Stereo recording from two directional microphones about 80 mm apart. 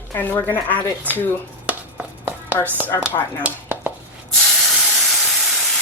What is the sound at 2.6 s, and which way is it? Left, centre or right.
Speech, right.